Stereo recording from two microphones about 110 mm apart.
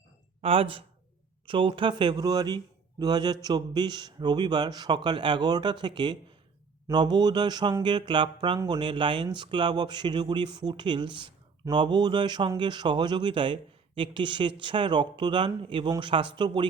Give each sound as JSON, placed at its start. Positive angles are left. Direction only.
{"t": 0.4, "sound": "a man's voice", "side_deg": -55}